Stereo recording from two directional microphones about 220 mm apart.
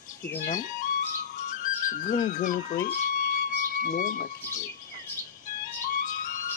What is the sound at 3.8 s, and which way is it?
Speech, 40° left (ahead or behind).